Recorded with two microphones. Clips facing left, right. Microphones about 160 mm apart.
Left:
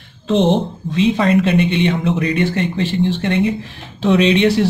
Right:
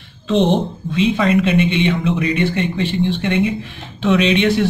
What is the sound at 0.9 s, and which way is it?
Speech, 35° left (ahead or behind).